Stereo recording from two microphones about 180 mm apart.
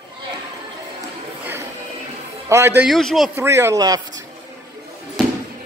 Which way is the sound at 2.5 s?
15° right (ahead or behind).